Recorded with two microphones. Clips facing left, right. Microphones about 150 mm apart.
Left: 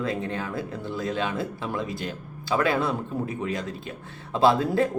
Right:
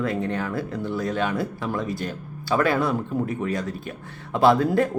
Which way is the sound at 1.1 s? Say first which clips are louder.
Right 1 dB; 50° right (ahead or behind).